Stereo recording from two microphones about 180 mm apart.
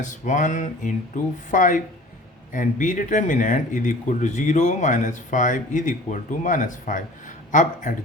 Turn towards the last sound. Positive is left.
turn(degrees=45)  # may be behind; listen again after turning